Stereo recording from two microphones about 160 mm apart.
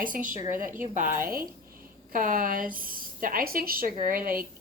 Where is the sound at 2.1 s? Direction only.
55° right (ahead or behind).